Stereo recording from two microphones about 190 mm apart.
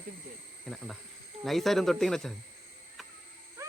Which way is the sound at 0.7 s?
Centre (ahead or behind).